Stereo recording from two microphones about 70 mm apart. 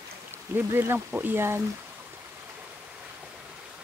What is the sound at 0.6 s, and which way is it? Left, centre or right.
Speech, right.